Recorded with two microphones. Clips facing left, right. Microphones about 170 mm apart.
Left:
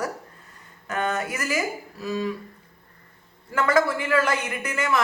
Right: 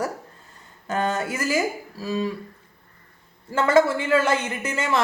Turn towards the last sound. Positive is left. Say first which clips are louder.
# right 1 dB
turn(degrees=-25)  # may be behind; listen again after turning